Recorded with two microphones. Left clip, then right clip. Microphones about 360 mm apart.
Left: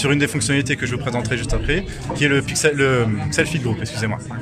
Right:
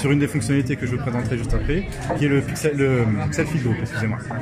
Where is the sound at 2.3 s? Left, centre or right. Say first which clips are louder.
Left 5 dB; left.